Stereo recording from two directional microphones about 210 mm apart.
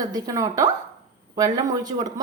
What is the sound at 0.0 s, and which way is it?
Speech, 15° right (ahead or behind).